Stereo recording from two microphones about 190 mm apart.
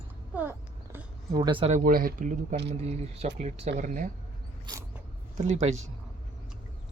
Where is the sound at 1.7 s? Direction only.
50° right (ahead or behind).